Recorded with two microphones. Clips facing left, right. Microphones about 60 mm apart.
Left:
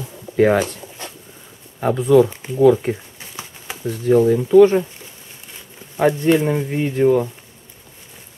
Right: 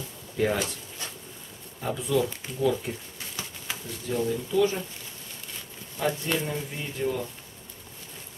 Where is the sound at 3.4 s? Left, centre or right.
Left.